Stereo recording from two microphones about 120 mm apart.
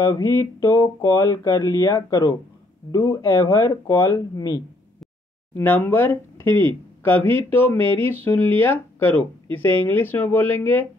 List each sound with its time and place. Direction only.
0.2 s speech: 25° left (ahead or behind)
5.6 s speech: 15° left (ahead or behind)